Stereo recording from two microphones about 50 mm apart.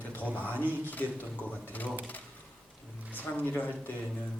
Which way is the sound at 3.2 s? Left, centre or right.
Left.